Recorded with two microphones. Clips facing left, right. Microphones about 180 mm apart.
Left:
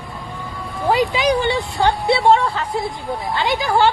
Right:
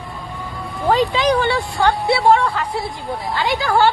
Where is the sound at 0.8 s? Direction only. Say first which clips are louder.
Right 1 dB; 10° left (ahead or behind).